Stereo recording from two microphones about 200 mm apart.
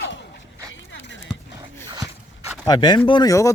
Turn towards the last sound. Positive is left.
turn(degrees=15)  # may be behind; listen again after turning